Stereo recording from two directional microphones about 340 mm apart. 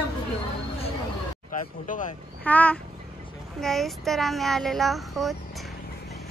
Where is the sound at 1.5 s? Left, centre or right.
Left.